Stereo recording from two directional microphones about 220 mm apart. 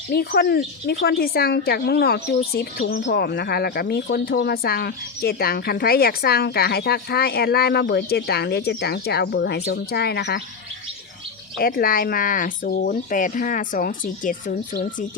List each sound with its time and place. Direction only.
0.1 s speech: 50° left (ahead or behind)
11.6 s speech: 40° left (ahead or behind)